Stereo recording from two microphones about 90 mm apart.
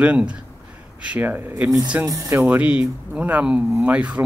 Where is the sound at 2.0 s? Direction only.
35° right (ahead or behind).